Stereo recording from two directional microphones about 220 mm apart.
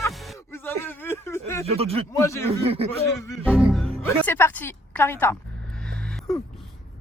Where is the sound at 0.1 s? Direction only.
Centre (ahead or behind).